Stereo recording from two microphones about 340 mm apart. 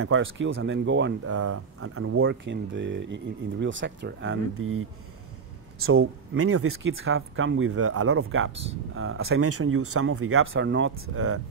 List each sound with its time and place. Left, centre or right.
0.0 s speech: right